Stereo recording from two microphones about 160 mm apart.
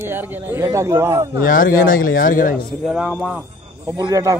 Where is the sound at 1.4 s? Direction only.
60° left (ahead or behind).